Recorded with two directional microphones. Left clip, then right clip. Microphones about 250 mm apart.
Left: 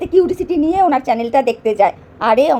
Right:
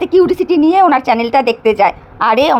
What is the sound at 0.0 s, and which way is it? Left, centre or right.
A woman's voice, right.